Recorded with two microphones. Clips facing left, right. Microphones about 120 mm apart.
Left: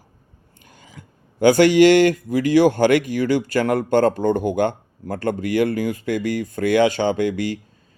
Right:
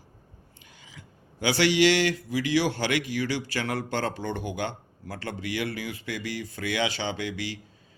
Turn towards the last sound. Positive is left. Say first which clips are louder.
# left 11 dB
turn(degrees=50)  # may be behind; listen again after turning